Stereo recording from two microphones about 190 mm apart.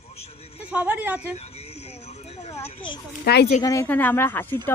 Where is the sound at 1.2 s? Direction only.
35° left (ahead or behind).